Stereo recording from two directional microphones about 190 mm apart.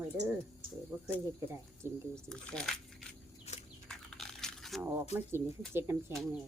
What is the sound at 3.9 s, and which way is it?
Biting, centre (ahead or behind).